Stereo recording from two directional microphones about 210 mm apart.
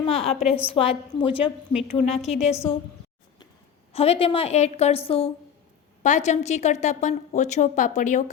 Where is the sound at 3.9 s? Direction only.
30° left (ahead or behind).